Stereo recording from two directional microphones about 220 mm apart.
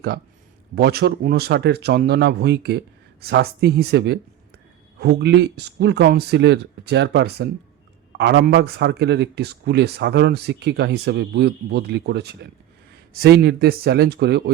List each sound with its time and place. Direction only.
0.8 s speech: 45° right (ahead or behind)